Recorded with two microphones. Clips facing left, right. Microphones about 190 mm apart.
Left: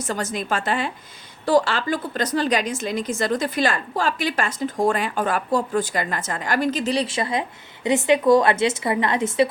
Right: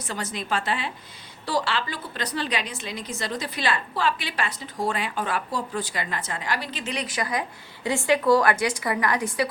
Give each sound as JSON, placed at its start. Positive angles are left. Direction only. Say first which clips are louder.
{"t": 0.0, "sound": "a woman's voice", "louder": "left 6 dB", "side_deg": 45}